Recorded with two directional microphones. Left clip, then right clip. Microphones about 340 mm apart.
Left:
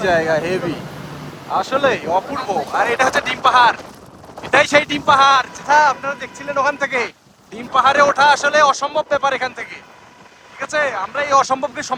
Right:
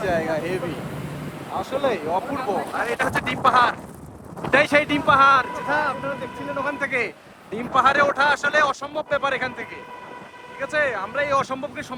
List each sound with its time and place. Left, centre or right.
0.0 s speech: left
2.8 s speech: centre